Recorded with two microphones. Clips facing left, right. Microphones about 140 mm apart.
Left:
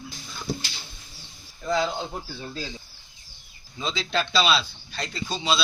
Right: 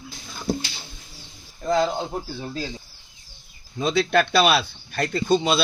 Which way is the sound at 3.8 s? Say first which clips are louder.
Right 8 dB; 55° right (ahead or behind).